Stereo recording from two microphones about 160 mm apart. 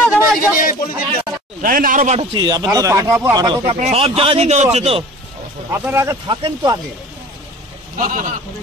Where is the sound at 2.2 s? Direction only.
25° right (ahead or behind).